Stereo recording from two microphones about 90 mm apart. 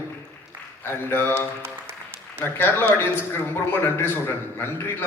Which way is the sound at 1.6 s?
30° right (ahead or behind).